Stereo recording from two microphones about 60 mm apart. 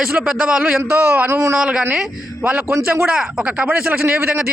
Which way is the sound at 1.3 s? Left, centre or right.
Right.